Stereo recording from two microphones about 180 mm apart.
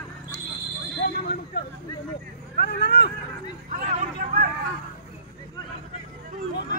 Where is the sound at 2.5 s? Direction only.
65° left (ahead or behind).